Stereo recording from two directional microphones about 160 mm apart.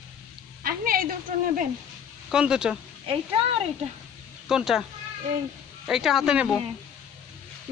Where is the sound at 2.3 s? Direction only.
5° right (ahead or behind).